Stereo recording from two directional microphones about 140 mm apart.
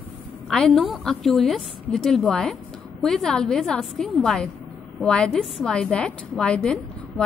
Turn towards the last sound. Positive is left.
turn(degrees=5)  # may be behind; listen again after turning